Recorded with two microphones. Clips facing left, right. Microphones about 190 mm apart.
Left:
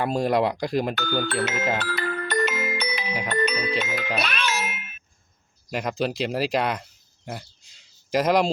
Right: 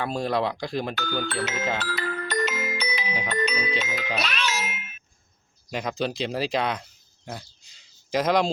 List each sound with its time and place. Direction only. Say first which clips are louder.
0.3 s speech: left 3 dB; 15° left (ahead or behind)
0.5 s speech: left 4 dB; 40° left (ahead or behind)
0.9 s speech: left 3 dB; 50° left (ahead or behind)
1.8 s music: left 2 dB; 55° left (ahead or behind)
5.7 s speech: left 2 dB; 5° left (ahead or behind)
8.1 s speech: left 2 dB; 5° left (ahead or behind)